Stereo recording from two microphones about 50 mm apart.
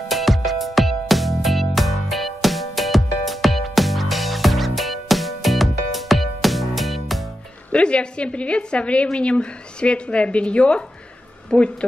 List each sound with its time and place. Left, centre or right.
0.1 s music: centre
7.7 s a woman's voice: left